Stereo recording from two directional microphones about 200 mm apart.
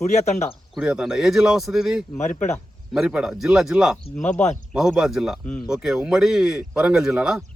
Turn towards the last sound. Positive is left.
turn(degrees=-5)  # may be behind; listen again after turning